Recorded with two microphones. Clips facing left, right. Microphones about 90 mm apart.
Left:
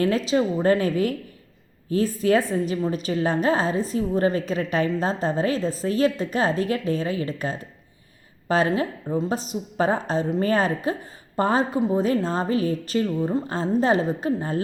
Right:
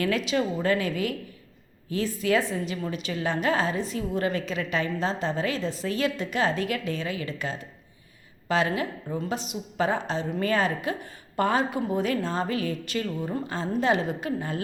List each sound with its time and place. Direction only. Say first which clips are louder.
0.0 s a woman's voice: left 4 dB; 35° left (ahead or behind)
13.1 s a woman's voice: left 7 dB; 25° left (ahead or behind)
13.5 s a woman's voice: left 2 dB; 35° left (ahead or behind)